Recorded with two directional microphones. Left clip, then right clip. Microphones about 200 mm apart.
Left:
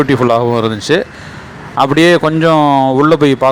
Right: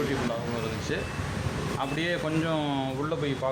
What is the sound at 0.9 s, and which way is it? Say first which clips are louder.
Speech: left 18 dB; 45° left (ahead or behind).